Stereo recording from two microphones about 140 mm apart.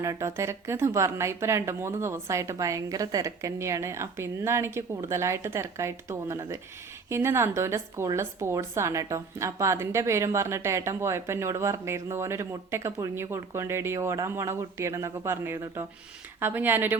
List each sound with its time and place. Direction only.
0.0 s speech: 20° right (ahead or behind)